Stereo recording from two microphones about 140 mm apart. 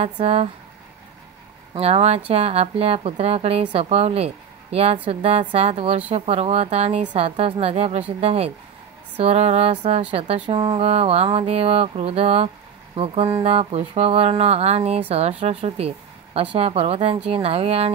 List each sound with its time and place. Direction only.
0.0 s a woman's voice: 45° right (ahead or behind)
1.7 s a woman's voice: 45° right (ahead or behind)